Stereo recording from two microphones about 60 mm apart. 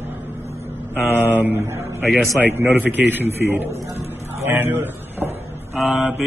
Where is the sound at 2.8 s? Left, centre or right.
Right.